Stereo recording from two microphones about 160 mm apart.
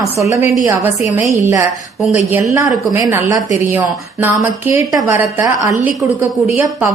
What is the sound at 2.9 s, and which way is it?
A woman's voice, 15° right (ahead or behind).